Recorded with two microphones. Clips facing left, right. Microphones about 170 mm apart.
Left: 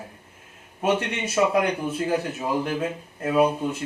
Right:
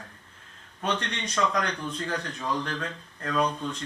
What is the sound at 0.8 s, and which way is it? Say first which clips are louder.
Speech: left 7 dB; 10° left (ahead or behind).